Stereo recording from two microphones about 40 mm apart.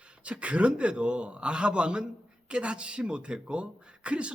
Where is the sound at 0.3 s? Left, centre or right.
Right.